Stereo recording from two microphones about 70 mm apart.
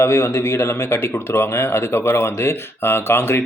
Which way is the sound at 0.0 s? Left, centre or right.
Left.